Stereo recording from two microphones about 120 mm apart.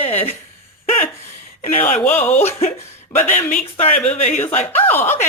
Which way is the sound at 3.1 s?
90° left.